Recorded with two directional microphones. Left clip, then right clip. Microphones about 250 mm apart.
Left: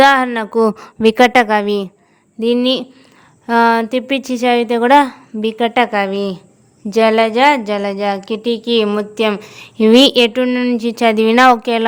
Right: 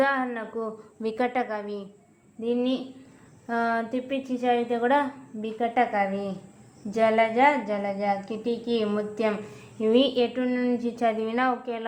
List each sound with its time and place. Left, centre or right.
0.0 s a woman's voice: left